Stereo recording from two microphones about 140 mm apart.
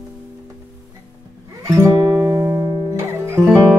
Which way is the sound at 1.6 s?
20° right (ahead or behind).